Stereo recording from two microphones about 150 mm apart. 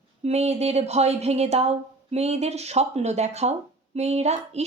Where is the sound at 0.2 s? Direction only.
45° right (ahead or behind).